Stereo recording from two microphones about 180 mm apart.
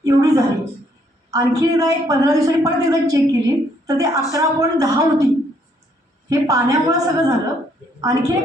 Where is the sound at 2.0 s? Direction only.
20° right (ahead or behind).